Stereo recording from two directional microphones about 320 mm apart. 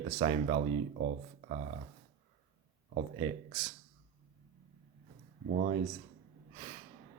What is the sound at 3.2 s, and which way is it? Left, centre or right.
Speech, centre.